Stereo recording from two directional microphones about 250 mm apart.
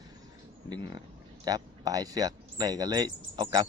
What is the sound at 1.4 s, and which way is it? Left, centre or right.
Speech, centre.